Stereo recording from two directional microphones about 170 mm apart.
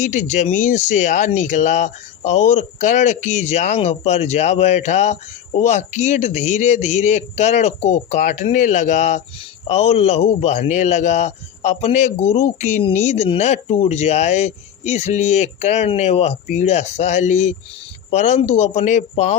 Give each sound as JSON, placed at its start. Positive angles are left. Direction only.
{"t": 0.0, "sound": "speech", "side_deg": 45}